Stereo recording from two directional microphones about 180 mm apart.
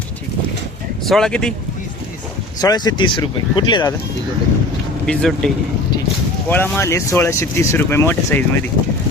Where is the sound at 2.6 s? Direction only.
20° left (ahead or behind).